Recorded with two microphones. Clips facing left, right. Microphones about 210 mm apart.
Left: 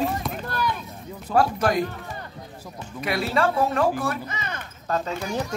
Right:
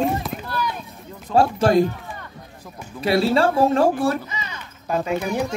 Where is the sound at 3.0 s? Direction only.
30° right (ahead or behind).